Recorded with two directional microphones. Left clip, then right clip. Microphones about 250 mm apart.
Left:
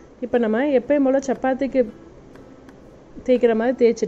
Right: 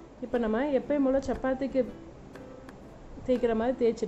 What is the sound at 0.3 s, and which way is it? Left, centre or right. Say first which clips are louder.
A woman's voice: left 9 dB; centre.